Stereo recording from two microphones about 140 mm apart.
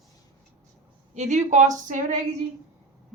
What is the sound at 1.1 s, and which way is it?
A woman's voice, 55° right (ahead or behind).